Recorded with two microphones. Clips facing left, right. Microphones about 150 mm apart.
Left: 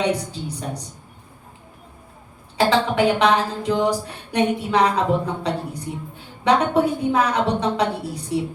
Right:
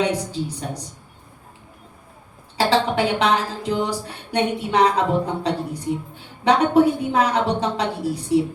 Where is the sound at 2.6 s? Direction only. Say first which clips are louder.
Left 1 dB; 30° right (ahead or behind).